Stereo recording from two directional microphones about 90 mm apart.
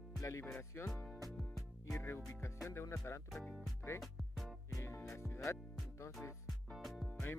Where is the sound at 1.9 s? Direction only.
30° left (ahead or behind).